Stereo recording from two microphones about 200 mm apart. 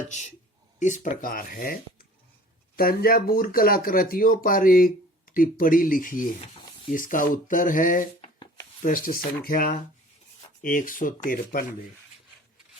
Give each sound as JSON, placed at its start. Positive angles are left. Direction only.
{"t": 0.1, "sound": "speech", "side_deg": 35}